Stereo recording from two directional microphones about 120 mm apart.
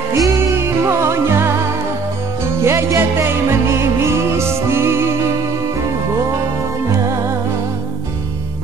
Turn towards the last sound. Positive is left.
turn(degrees=-25)  # may be behind; listen again after turning